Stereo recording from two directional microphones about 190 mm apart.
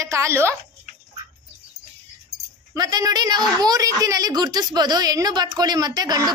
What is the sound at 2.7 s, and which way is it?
A woman's voice, 20° right (ahead or behind).